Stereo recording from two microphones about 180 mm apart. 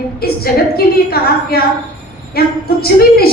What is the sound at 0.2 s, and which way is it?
A woman's voice, 60° left (ahead or behind).